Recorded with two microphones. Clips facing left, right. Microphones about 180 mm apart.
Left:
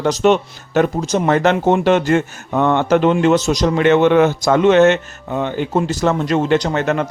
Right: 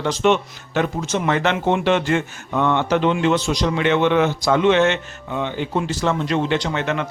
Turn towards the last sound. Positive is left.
turn(degrees=45)  # may be behind; listen again after turning